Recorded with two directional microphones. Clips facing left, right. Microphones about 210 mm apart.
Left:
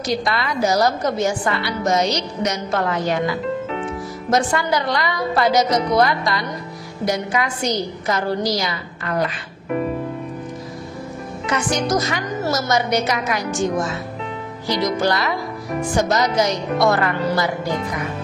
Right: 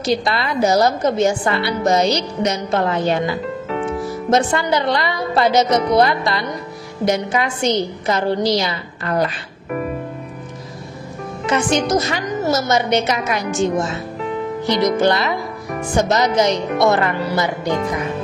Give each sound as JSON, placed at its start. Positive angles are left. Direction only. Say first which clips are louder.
{"t": 0.0, "sound": "a woman's voice", "louder": "right 3 dB", "side_deg": -30}
{"t": 11.4, "sound": "a woman's voice", "louder": "right 4 dB", "side_deg": -25}
{"t": 15.0, "sound": "a woman's voice", "louder": "right 3 dB", "side_deg": -25}